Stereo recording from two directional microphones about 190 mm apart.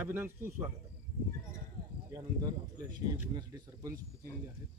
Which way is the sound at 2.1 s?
15° right (ahead or behind).